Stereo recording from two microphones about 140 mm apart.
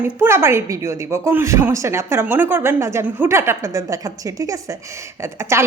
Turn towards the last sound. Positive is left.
turn(degrees=-20)  # may be behind; listen again after turning